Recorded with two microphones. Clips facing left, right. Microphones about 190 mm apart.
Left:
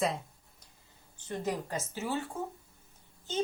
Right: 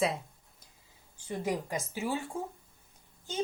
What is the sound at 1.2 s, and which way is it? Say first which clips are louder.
Speech: right 1 dB; 10° right (ahead or behind).